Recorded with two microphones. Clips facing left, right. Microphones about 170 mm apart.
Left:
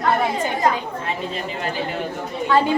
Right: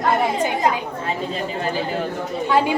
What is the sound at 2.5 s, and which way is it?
Speech, 10° right (ahead or behind).